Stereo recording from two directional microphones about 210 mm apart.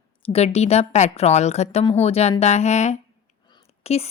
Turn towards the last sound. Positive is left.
turn(degrees=30)  # may be behind; listen again after turning